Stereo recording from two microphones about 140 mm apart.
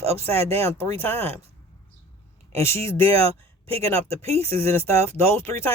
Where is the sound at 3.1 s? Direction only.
45° right (ahead or behind).